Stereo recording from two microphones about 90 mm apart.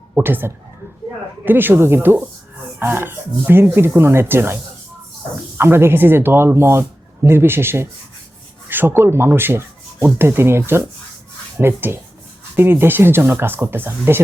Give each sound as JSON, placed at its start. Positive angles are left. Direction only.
{"t": 0.2, "sound": "speech", "side_deg": -25}